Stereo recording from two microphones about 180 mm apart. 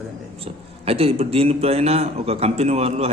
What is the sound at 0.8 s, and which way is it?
A man's voice, 35° right (ahead or behind).